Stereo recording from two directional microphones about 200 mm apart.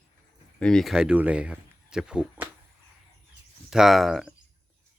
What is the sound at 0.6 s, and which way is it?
Speech, 5° left (ahead or behind).